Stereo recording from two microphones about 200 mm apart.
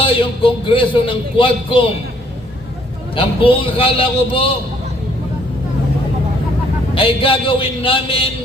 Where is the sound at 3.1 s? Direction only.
25° left (ahead or behind).